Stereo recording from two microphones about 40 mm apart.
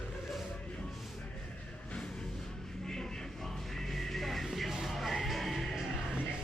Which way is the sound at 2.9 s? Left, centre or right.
Centre.